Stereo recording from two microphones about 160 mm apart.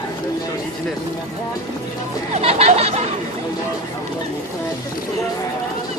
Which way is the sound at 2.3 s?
40° right (ahead or behind).